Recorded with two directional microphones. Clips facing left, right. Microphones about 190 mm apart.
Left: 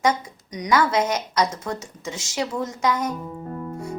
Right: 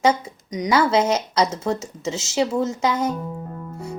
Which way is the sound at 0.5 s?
25° right (ahead or behind).